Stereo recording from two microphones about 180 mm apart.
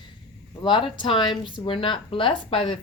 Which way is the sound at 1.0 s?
25° left (ahead or behind).